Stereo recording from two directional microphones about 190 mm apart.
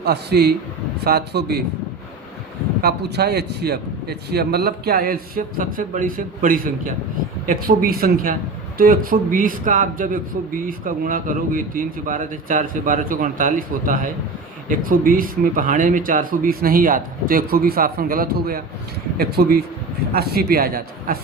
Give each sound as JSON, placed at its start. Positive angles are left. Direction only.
{"t": 0.0, "sound": "speech", "side_deg": -60}
{"t": 2.8, "sound": "a man's voice", "side_deg": -60}